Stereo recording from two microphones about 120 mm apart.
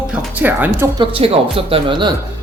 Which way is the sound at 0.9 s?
50° right (ahead or behind).